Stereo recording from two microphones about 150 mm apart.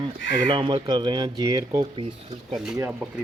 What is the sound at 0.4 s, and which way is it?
Speech, 35° right (ahead or behind).